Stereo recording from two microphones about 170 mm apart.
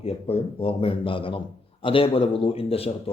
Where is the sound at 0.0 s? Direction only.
35° left (ahead or behind).